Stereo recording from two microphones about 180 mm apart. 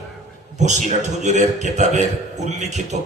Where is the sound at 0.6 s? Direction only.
40° right (ahead or behind).